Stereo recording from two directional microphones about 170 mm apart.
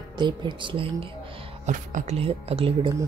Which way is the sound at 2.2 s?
35° right (ahead or behind).